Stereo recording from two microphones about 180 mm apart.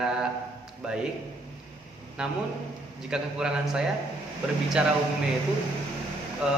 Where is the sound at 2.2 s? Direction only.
5° right (ahead or behind).